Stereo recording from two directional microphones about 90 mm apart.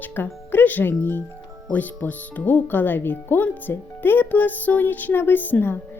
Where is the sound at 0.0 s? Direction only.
20° left (ahead or behind).